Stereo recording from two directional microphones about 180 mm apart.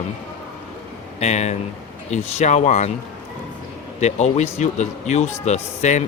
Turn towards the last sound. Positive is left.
turn(degrees=40)  # may be behind; listen again after turning